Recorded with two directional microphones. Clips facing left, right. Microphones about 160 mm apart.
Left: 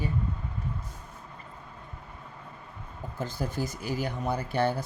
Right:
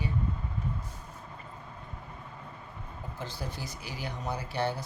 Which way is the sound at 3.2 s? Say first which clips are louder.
Left 8 dB; 50° left (ahead or behind).